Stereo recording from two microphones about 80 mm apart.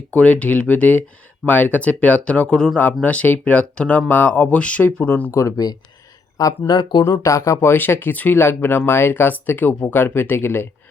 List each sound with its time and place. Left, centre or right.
0.1 s speech: centre
4.9 s speech: left
5.3 s speech: left
6.7 s speech: left
7.0 s speech: left